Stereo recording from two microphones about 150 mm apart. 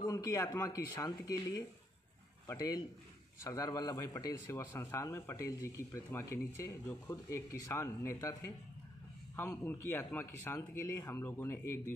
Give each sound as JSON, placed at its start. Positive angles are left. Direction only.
{"t": 0.0, "sound": "a man's voice", "side_deg": 20}